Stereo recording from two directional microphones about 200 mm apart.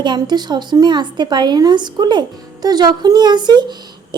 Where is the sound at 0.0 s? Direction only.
20° right (ahead or behind).